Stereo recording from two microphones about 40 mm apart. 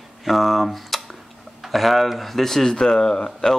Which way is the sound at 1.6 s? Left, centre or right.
Centre.